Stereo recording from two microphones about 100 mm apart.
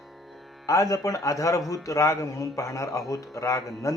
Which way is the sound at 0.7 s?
35° left (ahead or behind).